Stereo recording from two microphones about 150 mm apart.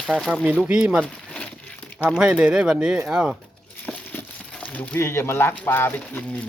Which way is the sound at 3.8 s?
10° left (ahead or behind).